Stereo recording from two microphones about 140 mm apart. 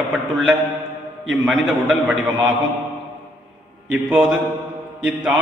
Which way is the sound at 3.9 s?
Centre (ahead or behind).